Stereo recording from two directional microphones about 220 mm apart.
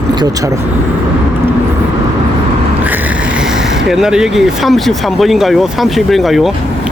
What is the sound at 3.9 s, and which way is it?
Speech, centre (ahead or behind).